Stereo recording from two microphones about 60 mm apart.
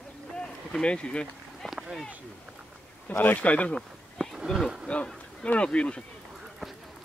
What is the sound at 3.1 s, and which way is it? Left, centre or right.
Speech, left.